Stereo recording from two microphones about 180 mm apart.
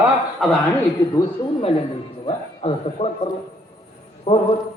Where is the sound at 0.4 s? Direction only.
Centre (ahead or behind).